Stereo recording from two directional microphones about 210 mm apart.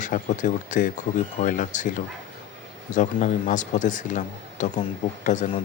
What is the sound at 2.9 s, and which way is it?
Speech, 35° left (ahead or behind).